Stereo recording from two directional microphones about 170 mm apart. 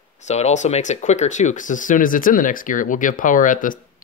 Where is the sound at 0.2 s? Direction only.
40° left (ahead or behind).